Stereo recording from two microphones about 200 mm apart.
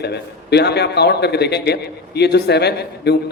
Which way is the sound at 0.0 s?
55° left (ahead or behind).